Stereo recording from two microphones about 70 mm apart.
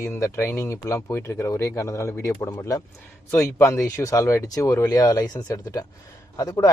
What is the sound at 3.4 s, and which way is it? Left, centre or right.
Speech, left.